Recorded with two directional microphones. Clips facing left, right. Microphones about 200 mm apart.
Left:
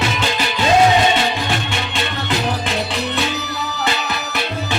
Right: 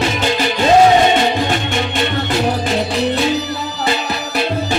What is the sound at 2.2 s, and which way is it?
Music, 35° right (ahead or behind).